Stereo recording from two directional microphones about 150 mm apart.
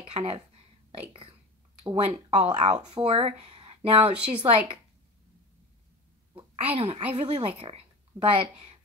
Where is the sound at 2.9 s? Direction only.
40° right (ahead or behind).